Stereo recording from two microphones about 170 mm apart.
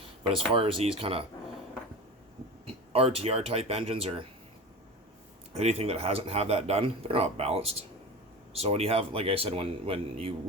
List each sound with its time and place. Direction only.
0.5 s speech: 35° right (ahead or behind)
2.6 s speech: 35° right (ahead or behind)
5.5 s speech: 35° right (ahead or behind)